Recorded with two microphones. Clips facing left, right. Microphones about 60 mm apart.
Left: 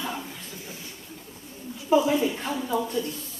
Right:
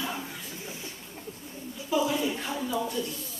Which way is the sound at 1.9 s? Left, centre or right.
Left.